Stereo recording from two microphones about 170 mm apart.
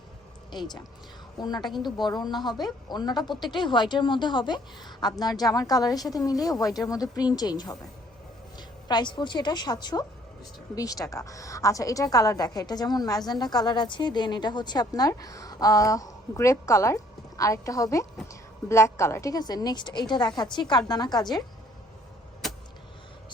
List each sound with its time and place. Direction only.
0.5 s a woman's voice: 25° left (ahead or behind)
22.4 s vehicle: centre (ahead or behind)